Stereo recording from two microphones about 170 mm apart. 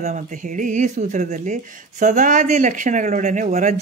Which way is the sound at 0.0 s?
45° right (ahead or behind).